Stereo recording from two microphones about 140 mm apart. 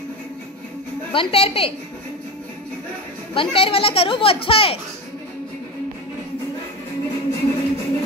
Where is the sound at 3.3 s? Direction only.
40° left (ahead or behind).